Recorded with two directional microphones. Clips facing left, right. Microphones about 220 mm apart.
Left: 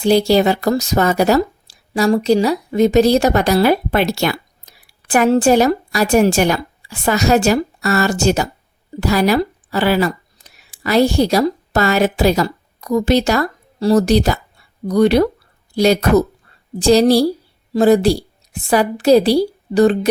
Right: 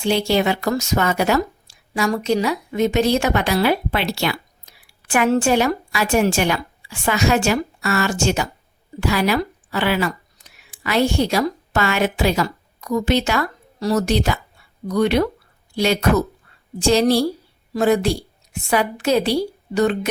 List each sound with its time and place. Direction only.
0.0 s a woman's voice: 35° left (ahead or behind)